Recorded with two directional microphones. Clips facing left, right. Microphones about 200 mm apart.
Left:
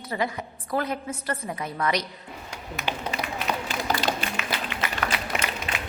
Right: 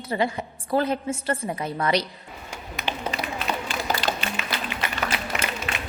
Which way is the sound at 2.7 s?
10° left (ahead or behind).